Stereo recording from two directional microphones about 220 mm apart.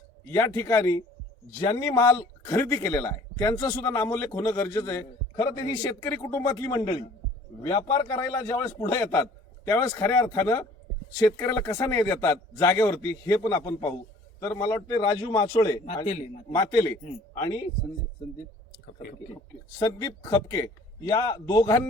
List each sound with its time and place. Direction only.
0.3 s a man's voice: 15° left (ahead or behind)
19.8 s a man's voice: 15° left (ahead or behind)